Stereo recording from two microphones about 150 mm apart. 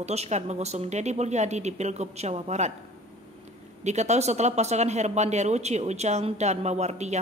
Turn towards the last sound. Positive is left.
turn(degrees=-50)  # may be behind; listen again after turning